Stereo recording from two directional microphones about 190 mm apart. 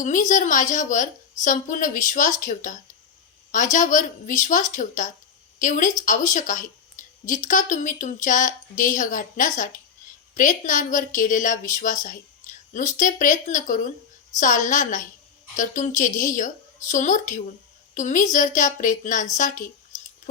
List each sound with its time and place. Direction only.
0.0 s a woman's voice: 40° left (ahead or behind)